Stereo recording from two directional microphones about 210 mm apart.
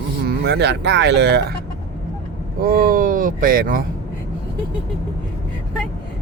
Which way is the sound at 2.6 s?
45° right (ahead or behind).